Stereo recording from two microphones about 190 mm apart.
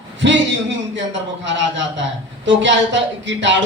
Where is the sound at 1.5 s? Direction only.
70° right (ahead or behind).